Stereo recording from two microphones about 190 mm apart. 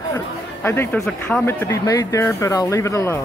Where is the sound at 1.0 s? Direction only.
5° left (ahead or behind).